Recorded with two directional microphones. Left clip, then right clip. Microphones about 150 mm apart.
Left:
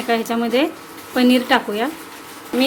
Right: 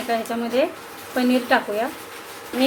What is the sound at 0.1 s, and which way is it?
A woman's voice, 70° left (ahead or behind).